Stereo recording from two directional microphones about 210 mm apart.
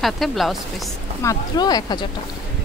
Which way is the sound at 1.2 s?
15° left (ahead or behind).